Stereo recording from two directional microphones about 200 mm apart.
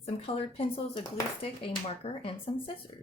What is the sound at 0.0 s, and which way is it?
Speech, 30° left (ahead or behind).